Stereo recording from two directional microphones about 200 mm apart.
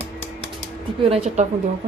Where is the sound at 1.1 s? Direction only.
30° right (ahead or behind).